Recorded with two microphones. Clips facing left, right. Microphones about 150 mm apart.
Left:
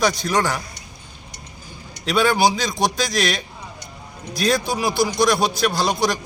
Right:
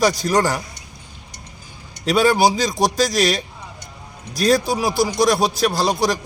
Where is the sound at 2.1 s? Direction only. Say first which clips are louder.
Right 2 dB; 40° right (ahead or behind).